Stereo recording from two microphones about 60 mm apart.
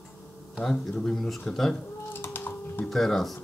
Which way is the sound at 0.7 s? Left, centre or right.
Centre.